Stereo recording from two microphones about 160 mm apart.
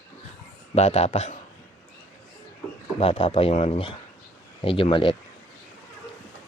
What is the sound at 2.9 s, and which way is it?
Chicken, 35° left (ahead or behind).